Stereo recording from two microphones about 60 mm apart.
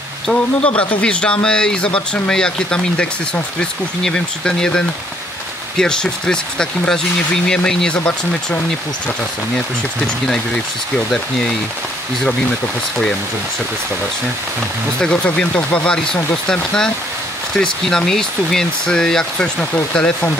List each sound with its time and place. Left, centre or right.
0.3 s speech: centre
15.0 s speech: centre
17.6 s speech: centre